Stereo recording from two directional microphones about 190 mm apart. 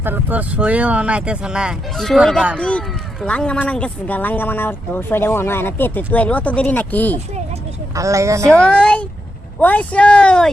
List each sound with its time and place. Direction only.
0.0 s speech: 10° right (ahead or behind); by 7.2 s 10° left (ahead or behind)
7.9 s speech: 15° right (ahead or behind)
8.4 s speech: 5° left (ahead or behind)